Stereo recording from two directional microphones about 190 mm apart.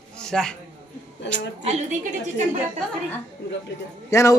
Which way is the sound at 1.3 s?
65° left (ahead or behind).